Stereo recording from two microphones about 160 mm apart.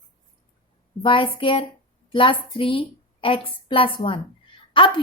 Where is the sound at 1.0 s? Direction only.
35° left (ahead or behind).